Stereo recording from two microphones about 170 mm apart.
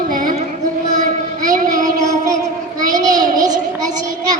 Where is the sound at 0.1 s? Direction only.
50° right (ahead or behind).